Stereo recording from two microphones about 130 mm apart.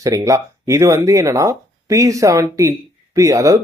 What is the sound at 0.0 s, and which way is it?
Speech, 25° right (ahead or behind).